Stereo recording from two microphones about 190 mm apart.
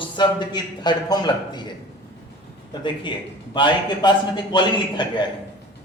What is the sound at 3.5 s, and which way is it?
A man's voice, 25° left (ahead or behind).